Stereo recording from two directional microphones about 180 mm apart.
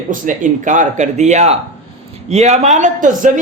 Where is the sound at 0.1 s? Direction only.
45° right (ahead or behind).